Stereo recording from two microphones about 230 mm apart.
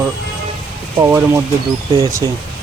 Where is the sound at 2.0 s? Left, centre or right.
Centre.